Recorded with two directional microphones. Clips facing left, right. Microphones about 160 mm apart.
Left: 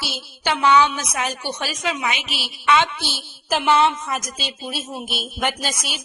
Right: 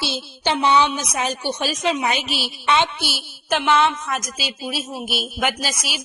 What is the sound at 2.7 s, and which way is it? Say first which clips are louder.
Speech: left 1 dB; 20° right (ahead or behind).